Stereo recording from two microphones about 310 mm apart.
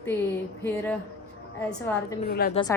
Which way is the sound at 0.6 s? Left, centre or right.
Centre.